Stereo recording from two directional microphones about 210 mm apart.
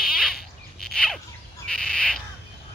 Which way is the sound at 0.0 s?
Centre (ahead or behind).